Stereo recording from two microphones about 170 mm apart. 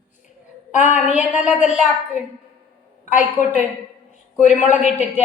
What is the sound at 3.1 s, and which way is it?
A man's voice, 45° left (ahead or behind).